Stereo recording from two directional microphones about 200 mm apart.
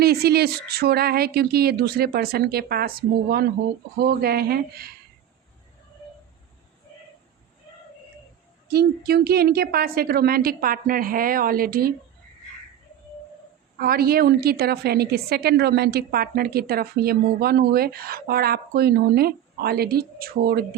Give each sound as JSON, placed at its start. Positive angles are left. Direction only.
{"t": 0.0, "sound": "a woman's voice", "side_deg": -50}
{"t": 8.6, "sound": "a woman's voice", "side_deg": -50}
{"t": 13.7, "sound": "a woman's voice", "side_deg": -50}